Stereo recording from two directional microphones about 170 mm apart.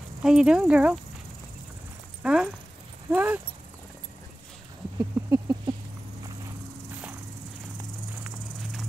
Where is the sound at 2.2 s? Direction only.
5° right (ahead or behind).